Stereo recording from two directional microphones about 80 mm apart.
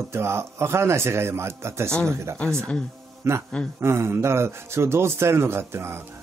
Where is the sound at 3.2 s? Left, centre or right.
Right.